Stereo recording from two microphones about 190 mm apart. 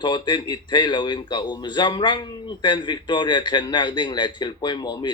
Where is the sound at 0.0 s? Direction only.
25° left (ahead or behind).